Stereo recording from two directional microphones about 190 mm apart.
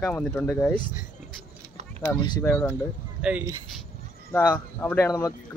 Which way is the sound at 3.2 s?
5° right (ahead or behind).